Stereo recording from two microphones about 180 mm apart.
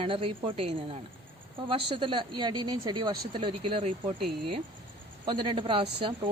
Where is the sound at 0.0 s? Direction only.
30° right (ahead or behind).